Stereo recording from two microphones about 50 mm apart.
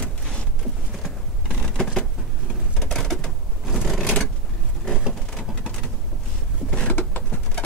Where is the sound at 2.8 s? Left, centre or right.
Centre.